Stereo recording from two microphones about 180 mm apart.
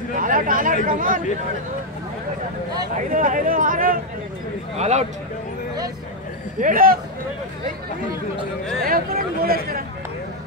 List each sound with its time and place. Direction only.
0.2 s speech: 50° right (ahead or behind)
3.1 s speech: 50° right (ahead or behind)
4.7 s speech: 40° right (ahead or behind)
6.6 s speech: 50° right (ahead or behind)
8.8 s speech: 55° right (ahead or behind)